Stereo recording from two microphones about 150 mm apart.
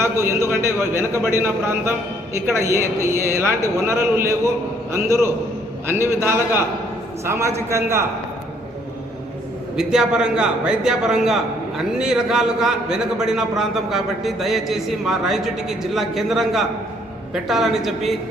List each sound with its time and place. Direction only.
0.0 s a man's voice: 15° right (ahead or behind)
9.7 s speech: 5° right (ahead or behind)